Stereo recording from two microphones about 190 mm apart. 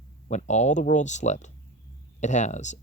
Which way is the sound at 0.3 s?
40° left (ahead or behind).